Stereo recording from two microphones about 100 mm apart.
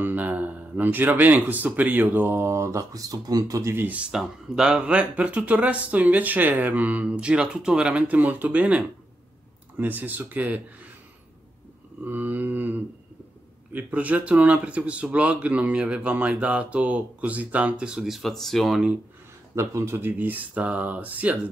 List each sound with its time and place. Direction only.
0.0 s speech: 20° right (ahead or behind)
12.0 s speech: 20° right (ahead or behind)
19.5 s speech: 30° right (ahead or behind)